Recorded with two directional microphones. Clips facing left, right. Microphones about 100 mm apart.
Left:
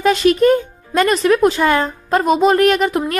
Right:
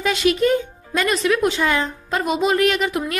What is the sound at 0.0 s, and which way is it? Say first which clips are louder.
Speech: left 6 dB; 45° left (ahead or behind).